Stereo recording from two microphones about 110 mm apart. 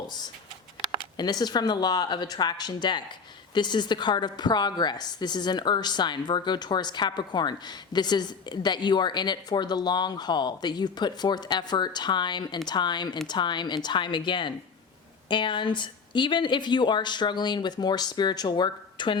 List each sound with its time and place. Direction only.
1.1 s a woman's voice: 40° left (ahead or behind)